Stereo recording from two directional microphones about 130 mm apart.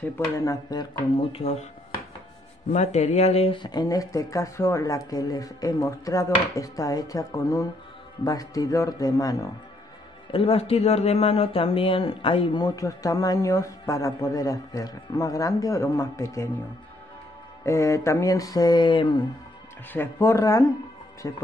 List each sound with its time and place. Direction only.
0.4 s speech: 25° left (ahead or behind)
1.1 s speech: 50° left (ahead or behind)
2.7 s speech: 60° left (ahead or behind); by 9.5 s 25° left (ahead or behind)
10.3 s speech: 50° left (ahead or behind); by 16.4 s 25° left (ahead or behind)
17.6 s speech: 25° left (ahead or behind)
19.9 s speech: 20° left (ahead or behind)